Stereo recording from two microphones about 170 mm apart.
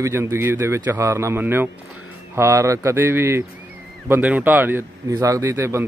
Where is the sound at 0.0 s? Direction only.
15° right (ahead or behind).